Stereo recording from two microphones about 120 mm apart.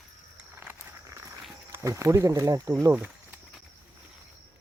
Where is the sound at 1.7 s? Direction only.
25° right (ahead or behind).